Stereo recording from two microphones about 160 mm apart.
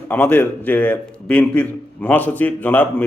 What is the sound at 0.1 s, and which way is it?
Speech, 10° left (ahead or behind).